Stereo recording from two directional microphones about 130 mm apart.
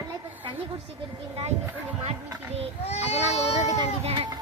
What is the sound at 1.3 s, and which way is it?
Speech, 55° right (ahead or behind).